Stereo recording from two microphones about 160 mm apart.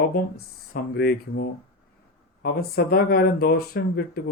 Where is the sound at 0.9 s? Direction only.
80° left.